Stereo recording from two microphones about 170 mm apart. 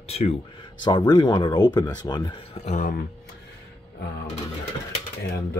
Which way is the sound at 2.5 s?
40° left (ahead or behind).